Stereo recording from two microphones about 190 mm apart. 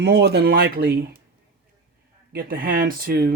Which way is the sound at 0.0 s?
60° right (ahead or behind).